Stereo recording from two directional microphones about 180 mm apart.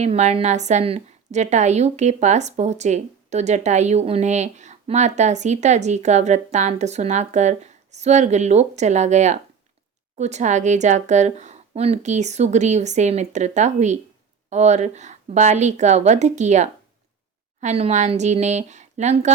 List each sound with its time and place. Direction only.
0.0 s a woman's voice: 35° right (ahead or behind)